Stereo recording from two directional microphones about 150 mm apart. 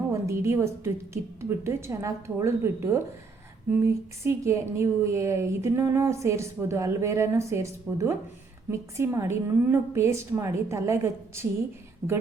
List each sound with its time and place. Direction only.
0.1 s a woman's voice: 20° right (ahead or behind)